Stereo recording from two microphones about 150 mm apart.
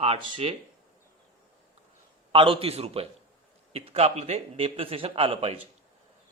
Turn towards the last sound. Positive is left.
turn(degrees=-40)  # may be behind; listen again after turning